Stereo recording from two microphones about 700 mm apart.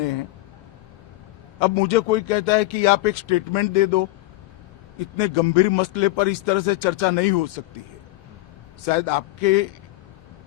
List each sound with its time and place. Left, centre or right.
1.5 s a man's voice: left
5.1 s a man's voice: left
8.9 s a man's voice: left